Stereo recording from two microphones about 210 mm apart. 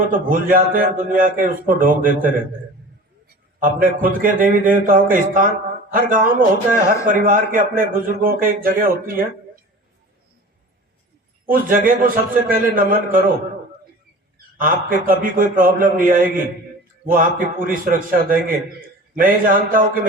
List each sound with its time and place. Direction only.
0.1 s a man's voice: 40° right (ahead or behind)
11.4 s a man's voice: 40° right (ahead or behind)
14.6 s a man's voice: 40° right (ahead or behind)